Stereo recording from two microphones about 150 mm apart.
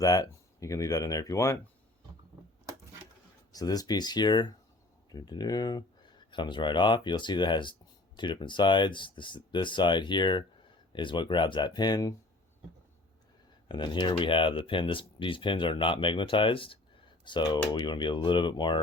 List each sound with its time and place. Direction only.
0.0 s speech: 25° left (ahead or behind)
3.5 s speech: 25° left (ahead or behind)
13.7 s speech: 30° left (ahead or behind)